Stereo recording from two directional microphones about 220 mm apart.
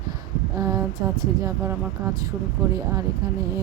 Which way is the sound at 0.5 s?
15° right (ahead or behind).